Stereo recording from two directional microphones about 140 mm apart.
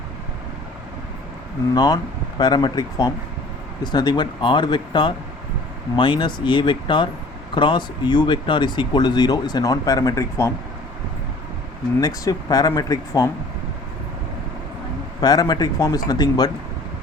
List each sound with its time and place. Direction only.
1.7 s speech: 30° left (ahead or behind)
11.9 s speech: 25° left (ahead or behind)
15.2 s speech: 30° left (ahead or behind)